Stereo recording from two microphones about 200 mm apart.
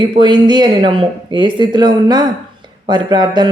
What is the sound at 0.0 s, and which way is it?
A man's voice, 25° right (ahead or behind).